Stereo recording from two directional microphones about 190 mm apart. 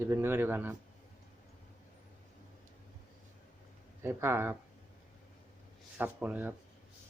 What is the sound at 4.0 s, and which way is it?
Speech, 10° right (ahead or behind).